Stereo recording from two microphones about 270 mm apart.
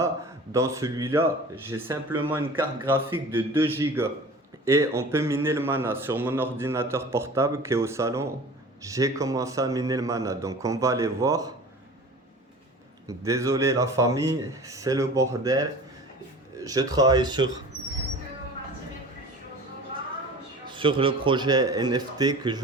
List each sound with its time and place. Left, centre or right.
0.5 s a man's voice: centre
13.1 s a man's voice: centre
16.6 s a man's voice: centre
20.7 s a man's voice: centre